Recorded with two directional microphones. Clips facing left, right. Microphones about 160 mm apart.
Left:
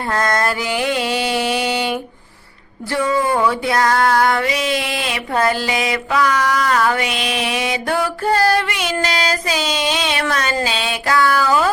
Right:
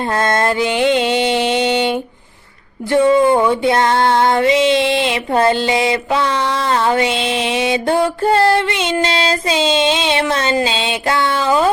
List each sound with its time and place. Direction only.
0.1 s music: 25° right (ahead or behind)